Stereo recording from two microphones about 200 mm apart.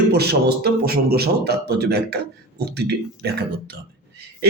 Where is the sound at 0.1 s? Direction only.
55° right (ahead or behind).